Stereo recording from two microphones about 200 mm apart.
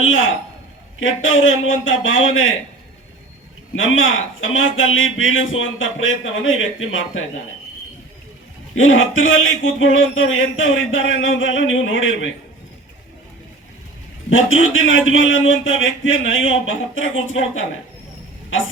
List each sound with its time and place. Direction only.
0.0 s a man's voice: 80° left
3.9 s a man's voice: 75° left (ahead or behind)
8.7 s a man's voice: 80° left
14.3 s a man's voice: 75° left (ahead or behind)